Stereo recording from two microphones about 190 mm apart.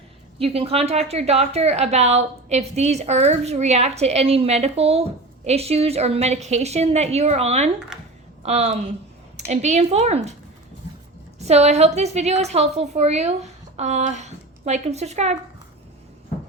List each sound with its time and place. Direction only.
0.3 s a woman's voice: 30° right (ahead or behind)
11.3 s a woman's voice: 35° right (ahead or behind)